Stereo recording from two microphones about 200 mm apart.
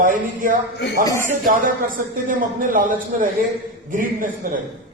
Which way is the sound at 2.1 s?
45° right (ahead or behind).